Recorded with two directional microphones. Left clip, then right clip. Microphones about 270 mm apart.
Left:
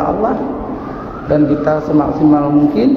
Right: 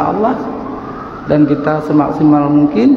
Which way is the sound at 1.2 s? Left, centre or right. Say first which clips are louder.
Right 1 dB; right.